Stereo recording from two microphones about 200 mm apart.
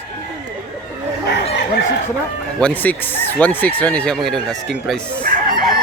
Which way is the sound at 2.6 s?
5° left (ahead or behind).